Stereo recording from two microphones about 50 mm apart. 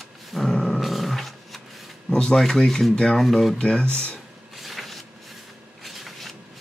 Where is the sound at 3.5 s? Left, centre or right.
Centre.